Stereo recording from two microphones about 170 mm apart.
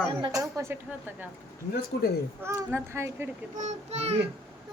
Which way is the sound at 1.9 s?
80° left.